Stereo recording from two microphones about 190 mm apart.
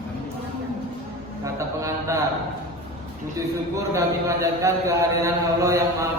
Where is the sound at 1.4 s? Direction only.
15° right (ahead or behind).